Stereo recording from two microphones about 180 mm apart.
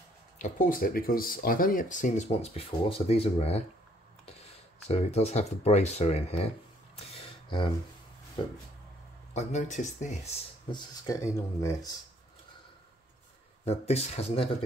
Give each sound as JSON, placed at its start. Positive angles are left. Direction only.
{"t": 0.4, "sound": "speech", "side_deg": 45}
{"t": 7.0, "sound": "a sound", "side_deg": 35}
{"t": 9.3, "sound": "speech", "side_deg": 40}
{"t": 10.7, "sound": "speech", "side_deg": 20}
{"t": 13.7, "sound": "speech", "side_deg": 35}